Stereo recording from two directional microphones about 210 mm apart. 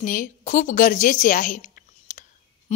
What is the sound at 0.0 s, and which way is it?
A woman's voice, 40° left (ahead or behind).